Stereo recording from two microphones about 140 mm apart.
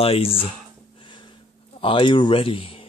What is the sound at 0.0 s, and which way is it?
Speech, 45° left (ahead or behind).